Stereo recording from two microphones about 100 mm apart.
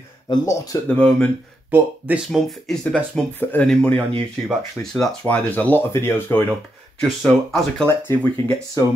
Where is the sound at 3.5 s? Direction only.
15° left (ahead or behind).